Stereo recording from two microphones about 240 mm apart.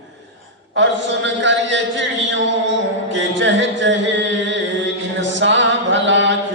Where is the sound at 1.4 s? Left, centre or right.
Right.